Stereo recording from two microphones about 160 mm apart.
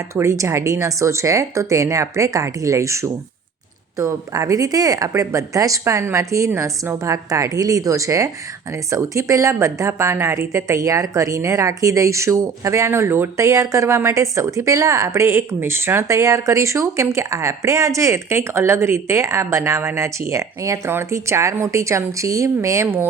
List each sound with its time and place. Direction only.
0.1 s a woman's voice: 20° right (ahead or behind)